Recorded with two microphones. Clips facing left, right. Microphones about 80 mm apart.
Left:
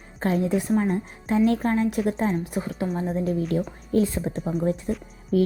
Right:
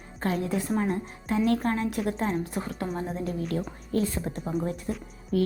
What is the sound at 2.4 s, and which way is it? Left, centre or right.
Speech, centre.